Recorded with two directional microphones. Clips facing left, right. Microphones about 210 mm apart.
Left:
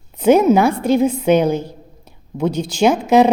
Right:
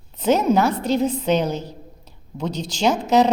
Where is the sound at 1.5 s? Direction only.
55° left (ahead or behind).